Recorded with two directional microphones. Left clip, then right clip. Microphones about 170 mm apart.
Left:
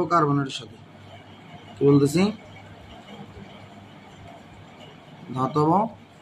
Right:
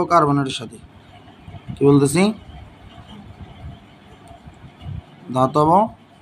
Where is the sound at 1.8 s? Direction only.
50° right (ahead or behind).